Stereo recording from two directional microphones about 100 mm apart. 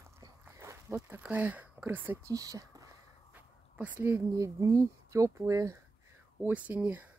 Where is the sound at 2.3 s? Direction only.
35° right (ahead or behind).